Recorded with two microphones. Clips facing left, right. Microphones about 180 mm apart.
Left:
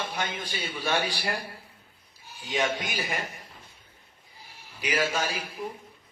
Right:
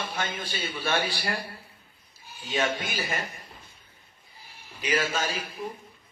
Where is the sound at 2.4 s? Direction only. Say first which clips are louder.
Even; 15° left (ahead or behind).